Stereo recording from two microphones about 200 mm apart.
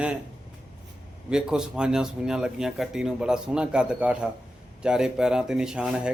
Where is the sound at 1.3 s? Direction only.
5° right (ahead or behind).